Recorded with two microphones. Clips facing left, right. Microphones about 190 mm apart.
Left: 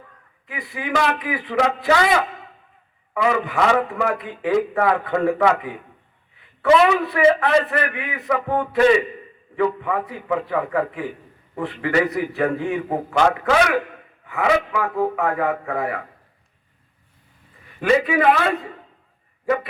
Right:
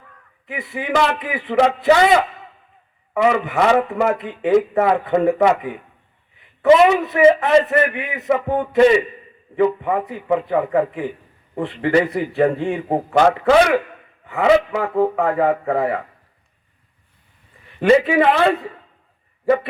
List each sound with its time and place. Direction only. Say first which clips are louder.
0.4 s a man's voice: right 4 dB; 25° right (ahead or behind)
6.6 s a man's voice: right 3 dB; 20° right (ahead or behind)
17.7 s a man's voice: right 4 dB; 30° right (ahead or behind)